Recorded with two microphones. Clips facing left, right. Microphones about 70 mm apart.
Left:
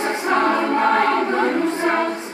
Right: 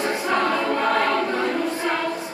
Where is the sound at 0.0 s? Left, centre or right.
Left.